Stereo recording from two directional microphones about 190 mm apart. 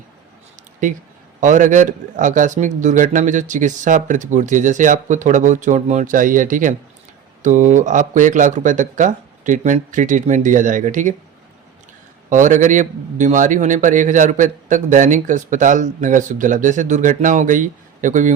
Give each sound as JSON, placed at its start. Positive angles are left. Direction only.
{"t": 1.4, "sound": "a man's voice", "side_deg": -40}
{"t": 12.3, "sound": "a man's voice", "side_deg": -40}